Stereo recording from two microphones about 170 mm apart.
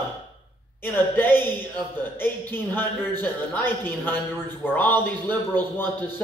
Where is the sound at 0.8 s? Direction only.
10° left (ahead or behind).